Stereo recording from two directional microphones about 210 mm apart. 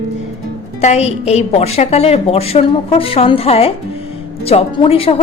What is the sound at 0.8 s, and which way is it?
A woman's voice, 30° left (ahead or behind).